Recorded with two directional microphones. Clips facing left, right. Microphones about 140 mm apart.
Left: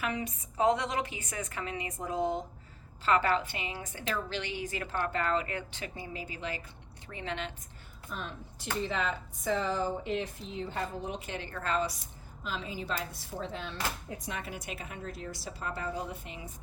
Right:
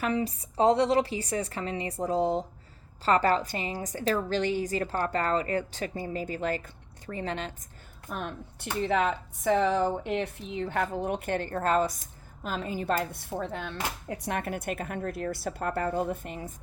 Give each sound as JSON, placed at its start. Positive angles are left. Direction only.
{"t": 0.0, "sound": "a woman's voice", "side_deg": -35}
{"t": 8.1, "sound": "a woman's voice", "side_deg": -55}
{"t": 14.1, "sound": "speech", "side_deg": -65}